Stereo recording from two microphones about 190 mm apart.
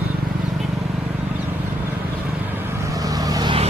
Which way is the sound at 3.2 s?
20° right (ahead or behind).